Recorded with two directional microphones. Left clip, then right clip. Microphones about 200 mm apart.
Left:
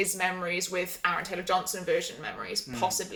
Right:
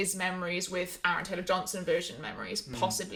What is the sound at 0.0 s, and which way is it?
Speech, 20° right (ahead or behind).